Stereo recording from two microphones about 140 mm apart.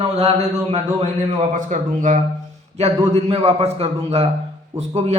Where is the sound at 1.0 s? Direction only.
60° right (ahead or behind).